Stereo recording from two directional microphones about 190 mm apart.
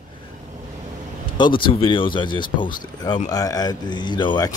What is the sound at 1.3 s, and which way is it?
Speech, 25° left (ahead or behind).